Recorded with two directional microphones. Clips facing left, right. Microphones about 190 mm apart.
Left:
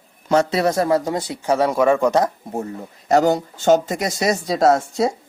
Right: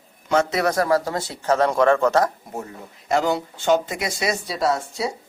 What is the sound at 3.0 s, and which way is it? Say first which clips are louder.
Speech: left 5 dB; 40° left (ahead or behind).